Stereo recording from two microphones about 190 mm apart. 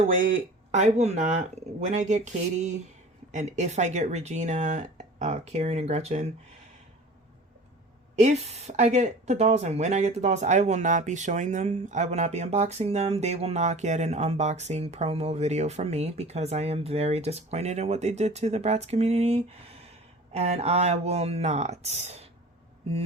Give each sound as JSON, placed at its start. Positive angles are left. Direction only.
{"t": 0.7, "sound": "speech", "side_deg": -35}
{"t": 8.1, "sound": "speech", "side_deg": -35}